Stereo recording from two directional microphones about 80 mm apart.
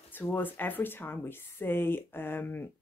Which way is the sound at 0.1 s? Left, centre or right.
Left.